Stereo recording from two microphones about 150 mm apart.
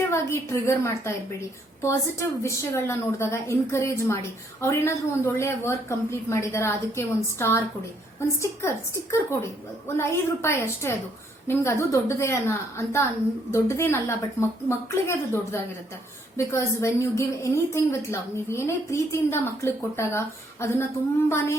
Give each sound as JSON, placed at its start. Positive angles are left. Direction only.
{"t": 0.1, "sound": "a woman's voice", "side_deg": 20}